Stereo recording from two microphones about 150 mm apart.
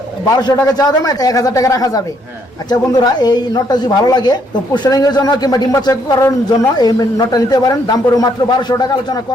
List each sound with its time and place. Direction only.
0.5 s speech: 25° left (ahead or behind)